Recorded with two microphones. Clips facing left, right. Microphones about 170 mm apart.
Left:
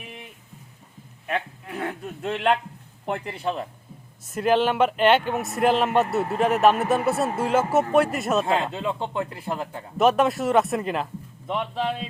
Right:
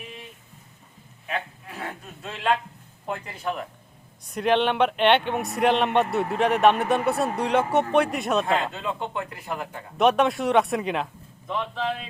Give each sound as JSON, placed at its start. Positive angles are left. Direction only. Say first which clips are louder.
{"t": 1.3, "sound": "speech", "louder": "left 3 dB", "side_deg": 55}
{"t": 3.2, "sound": "speech", "louder": "left 2 dB", "side_deg": 25}
{"t": 4.3, "sound": "speech", "louder": "left 1 dB", "side_deg": 5}
{"t": 8.4, "sound": "speech", "louder": "left 1 dB", "side_deg": 25}
{"t": 10.0, "sound": "speech", "louder": "left 1 dB", "side_deg": 0}
{"t": 11.4, "sound": "speech", "louder": "left 1 dB", "side_deg": 25}